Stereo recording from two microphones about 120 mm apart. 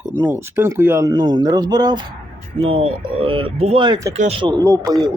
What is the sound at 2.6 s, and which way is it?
Speech, 50° right (ahead or behind).